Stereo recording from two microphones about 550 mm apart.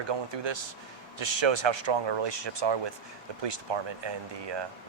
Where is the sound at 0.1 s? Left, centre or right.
Right.